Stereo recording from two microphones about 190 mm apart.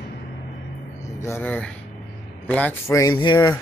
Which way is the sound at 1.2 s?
10° left (ahead or behind).